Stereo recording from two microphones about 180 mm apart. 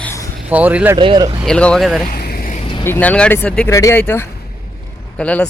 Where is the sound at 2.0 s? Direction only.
55° left (ahead or behind).